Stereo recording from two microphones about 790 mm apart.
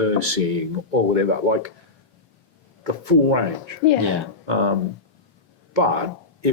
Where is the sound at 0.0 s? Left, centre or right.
Right.